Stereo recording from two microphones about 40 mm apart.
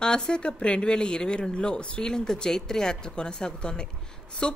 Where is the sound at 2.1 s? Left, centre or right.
Centre.